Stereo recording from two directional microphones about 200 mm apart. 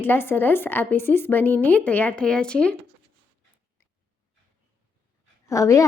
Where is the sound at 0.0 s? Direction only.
10° left (ahead or behind).